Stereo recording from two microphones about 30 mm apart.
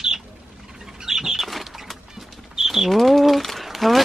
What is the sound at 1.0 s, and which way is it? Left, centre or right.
Bird flight, centre.